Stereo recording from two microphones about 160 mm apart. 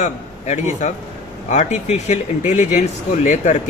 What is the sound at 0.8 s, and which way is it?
Speech, 45° left (ahead or behind).